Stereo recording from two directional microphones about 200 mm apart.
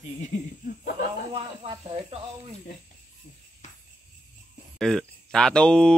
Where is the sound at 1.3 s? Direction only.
30° right (ahead or behind).